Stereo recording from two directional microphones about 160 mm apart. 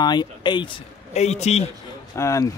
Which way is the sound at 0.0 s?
25° left (ahead or behind).